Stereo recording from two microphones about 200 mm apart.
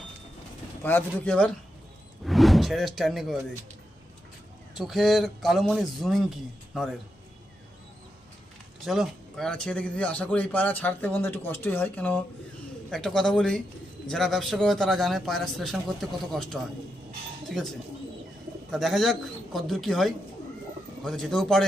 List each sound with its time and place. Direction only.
0.8 s a man's voice: 10° left (ahead or behind)
4.8 s a man's voice: centre (ahead or behind)
8.8 s a man's voice: centre (ahead or behind)